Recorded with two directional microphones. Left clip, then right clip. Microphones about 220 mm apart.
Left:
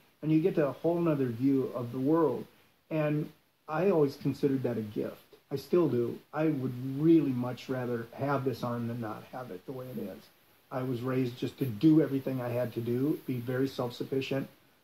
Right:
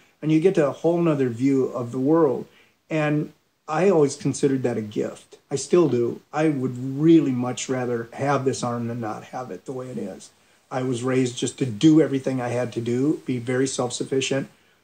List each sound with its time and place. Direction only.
0.2 s speech: 30° right (ahead or behind)